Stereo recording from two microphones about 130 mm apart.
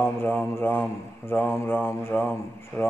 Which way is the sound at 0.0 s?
15° left (ahead or behind).